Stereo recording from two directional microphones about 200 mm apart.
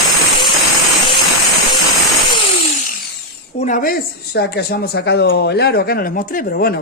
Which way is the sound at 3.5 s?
40° left (ahead or behind).